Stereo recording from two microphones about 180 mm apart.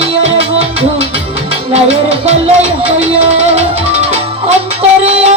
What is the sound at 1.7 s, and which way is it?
Music, 35° right (ahead or behind).